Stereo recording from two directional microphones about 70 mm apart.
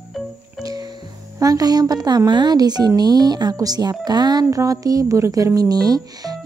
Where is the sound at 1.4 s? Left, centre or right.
Right.